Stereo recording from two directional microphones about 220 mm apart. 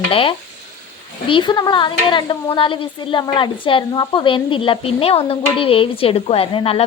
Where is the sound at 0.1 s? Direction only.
25° left (ahead or behind).